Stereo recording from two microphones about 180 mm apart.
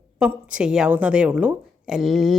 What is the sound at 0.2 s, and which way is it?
A woman's voice, 5° right (ahead or behind).